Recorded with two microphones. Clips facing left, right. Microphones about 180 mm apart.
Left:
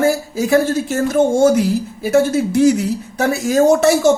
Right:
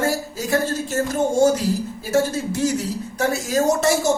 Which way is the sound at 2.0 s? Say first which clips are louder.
Left 7 dB; 65° left (ahead or behind).